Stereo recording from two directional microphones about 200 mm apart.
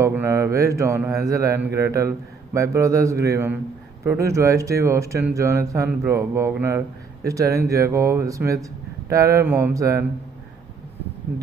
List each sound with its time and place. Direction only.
0.0 s a man's voice: 15° right (ahead or behind)